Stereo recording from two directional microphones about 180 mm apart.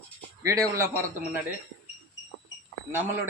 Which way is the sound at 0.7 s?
15° right (ahead or behind).